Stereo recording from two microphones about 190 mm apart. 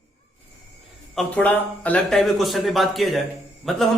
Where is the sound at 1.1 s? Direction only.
5° left (ahead or behind).